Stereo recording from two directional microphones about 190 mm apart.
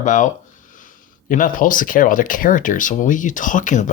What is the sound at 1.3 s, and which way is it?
Speech, 45° left (ahead or behind).